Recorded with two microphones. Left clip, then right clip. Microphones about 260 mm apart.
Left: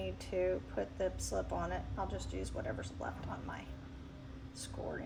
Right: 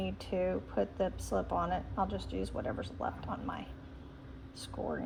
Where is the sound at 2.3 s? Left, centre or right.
Right.